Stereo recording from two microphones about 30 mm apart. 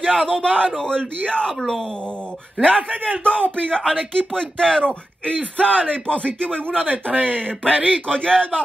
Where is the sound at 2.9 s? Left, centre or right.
Right.